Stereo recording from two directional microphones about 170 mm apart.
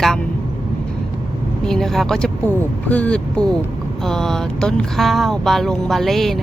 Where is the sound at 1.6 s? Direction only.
5° left (ahead or behind).